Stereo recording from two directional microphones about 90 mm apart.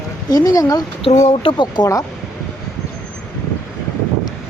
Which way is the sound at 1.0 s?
85° left.